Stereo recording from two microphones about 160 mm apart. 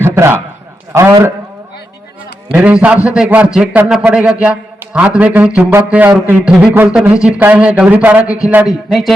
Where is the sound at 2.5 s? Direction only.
5° right (ahead or behind).